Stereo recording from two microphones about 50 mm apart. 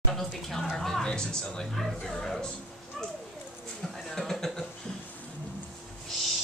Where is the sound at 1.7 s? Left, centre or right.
Centre.